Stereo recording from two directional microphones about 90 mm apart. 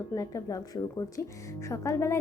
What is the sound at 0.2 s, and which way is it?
A woman's voice, 40° left (ahead or behind).